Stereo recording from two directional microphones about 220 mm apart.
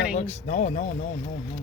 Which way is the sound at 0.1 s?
30° left (ahead or behind).